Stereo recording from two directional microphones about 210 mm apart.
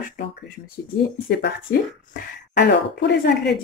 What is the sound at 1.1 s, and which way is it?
A woman's voice, 50° left (ahead or behind).